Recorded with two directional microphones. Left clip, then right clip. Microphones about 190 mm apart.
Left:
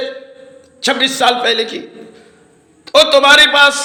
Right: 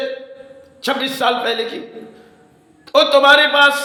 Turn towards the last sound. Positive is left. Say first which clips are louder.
# left 3 dB
turn(degrees=20)  # may be behind; listen again after turning